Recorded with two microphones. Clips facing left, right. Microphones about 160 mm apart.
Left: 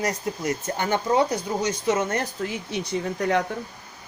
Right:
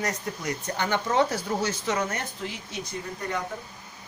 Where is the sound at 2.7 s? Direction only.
80° left.